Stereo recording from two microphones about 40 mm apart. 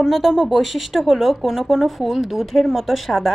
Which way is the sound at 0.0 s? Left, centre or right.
Centre.